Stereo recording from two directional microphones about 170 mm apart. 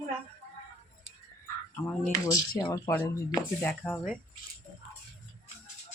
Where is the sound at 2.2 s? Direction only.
20° left (ahead or behind).